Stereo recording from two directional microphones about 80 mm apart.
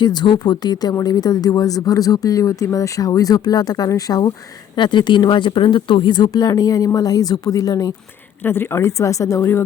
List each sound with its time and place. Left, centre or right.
0.0 s a woman's voice: left
4.8 s speech: left
8.4 s a woman's voice: left
9.0 s speech: left